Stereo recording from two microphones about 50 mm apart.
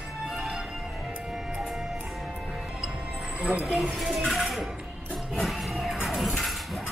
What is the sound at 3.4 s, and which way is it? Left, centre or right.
Speech, right.